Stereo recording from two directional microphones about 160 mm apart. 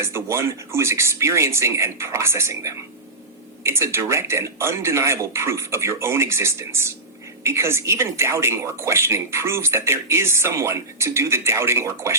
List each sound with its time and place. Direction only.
0.0 s a woman's voice: 15° right (ahead or behind)